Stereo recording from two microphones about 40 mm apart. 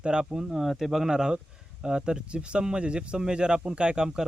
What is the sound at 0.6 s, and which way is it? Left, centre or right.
Speech, centre.